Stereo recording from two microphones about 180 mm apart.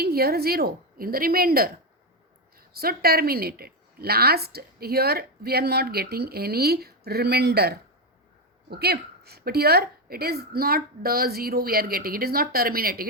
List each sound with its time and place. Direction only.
0.0 s speech: 60° right (ahead or behind)